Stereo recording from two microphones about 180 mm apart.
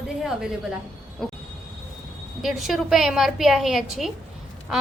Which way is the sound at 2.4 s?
Centre (ahead or behind).